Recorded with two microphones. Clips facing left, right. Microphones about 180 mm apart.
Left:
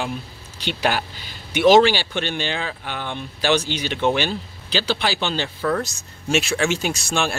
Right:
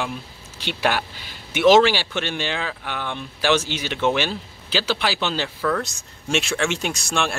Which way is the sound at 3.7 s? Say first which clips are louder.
Left 1 dB; 5° right (ahead or behind).